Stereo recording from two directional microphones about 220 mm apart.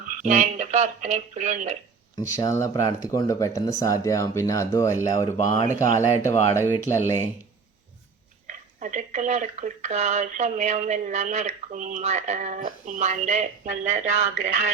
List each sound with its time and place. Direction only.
0.2 s speech: 30° right (ahead or behind)
2.1 s speech: 15° left (ahead or behind)
8.4 s speech: 35° right (ahead or behind)